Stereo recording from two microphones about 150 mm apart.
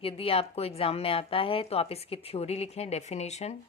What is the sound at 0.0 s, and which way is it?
A woman's voice, 40° left (ahead or behind).